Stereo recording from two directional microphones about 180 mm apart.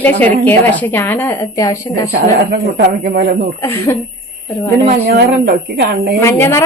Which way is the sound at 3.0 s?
55° right (ahead or behind).